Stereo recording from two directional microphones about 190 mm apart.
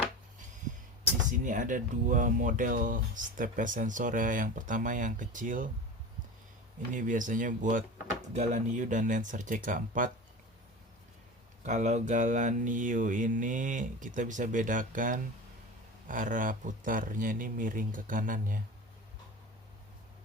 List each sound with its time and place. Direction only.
1.3 s speech: 40° right (ahead or behind)
6.9 s speech: 45° right (ahead or behind)
11.6 s speech: 40° right (ahead or behind)